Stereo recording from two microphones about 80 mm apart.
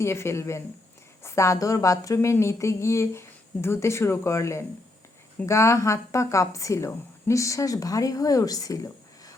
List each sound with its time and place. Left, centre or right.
0.0 s a woman's voice: left